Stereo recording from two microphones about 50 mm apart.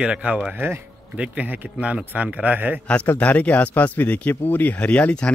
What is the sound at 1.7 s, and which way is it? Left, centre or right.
Speech, right.